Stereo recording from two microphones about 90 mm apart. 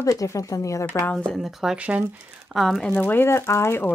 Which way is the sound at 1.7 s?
15° right (ahead or behind).